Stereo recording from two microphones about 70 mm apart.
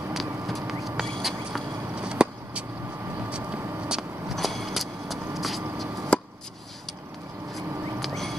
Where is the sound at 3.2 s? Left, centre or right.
Centre.